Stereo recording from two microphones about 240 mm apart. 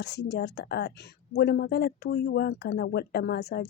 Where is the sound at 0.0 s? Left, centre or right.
Left.